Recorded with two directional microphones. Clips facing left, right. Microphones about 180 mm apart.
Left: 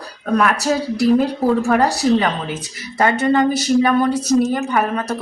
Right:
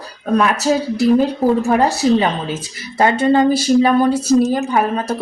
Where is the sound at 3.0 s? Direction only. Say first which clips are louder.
Right 2 dB; 30° right (ahead or behind).